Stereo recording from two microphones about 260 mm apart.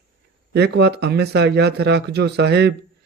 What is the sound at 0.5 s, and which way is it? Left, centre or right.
Speech, right.